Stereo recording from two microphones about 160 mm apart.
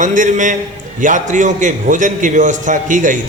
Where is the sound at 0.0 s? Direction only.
50° right (ahead or behind).